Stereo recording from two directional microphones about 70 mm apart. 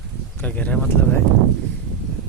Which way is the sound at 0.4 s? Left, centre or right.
Centre.